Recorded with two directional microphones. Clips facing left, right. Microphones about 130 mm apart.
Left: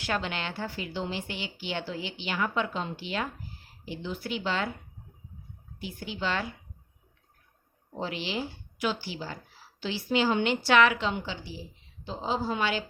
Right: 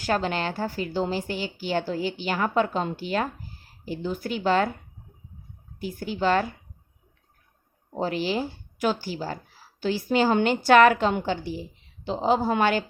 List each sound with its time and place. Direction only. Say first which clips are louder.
0.0 s speech: right 6 dB; 40° right (ahead or behind)
5.8 s speech: right 8 dB; 45° right (ahead or behind)
7.9 s speech: right 7 dB; 45° right (ahead or behind)
12.0 s a woman's voice: right 8 dB; 70° right (ahead or behind); by 12.8 s 50° right (ahead or behind)